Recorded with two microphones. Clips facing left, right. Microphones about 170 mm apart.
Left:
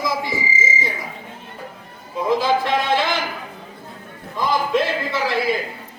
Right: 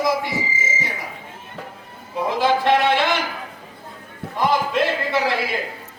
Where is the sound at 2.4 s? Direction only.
65° right (ahead or behind).